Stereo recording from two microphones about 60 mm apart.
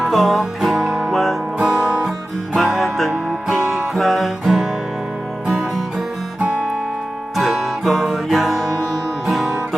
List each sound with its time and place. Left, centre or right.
0.0 s music: centre
1.5 s music: centre
6.4 s music: centre
7.3 s music: centre